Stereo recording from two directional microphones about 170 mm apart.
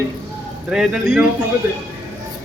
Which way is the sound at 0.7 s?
5° right (ahead or behind).